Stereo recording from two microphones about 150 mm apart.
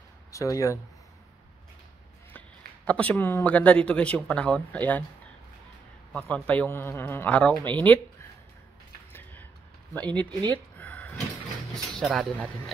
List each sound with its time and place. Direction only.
0.3 s speech: 20° left (ahead or behind)
2.3 s speech: 10° left (ahead or behind)
6.1 s a man's voice: 10° left (ahead or behind)
9.1 s a sound: 15° left (ahead or behind)
9.9 s a man's voice: 10° left (ahead or behind)
10.5 s a sound: 10° left (ahead or behind)
11.7 s speech: 5° left (ahead or behind)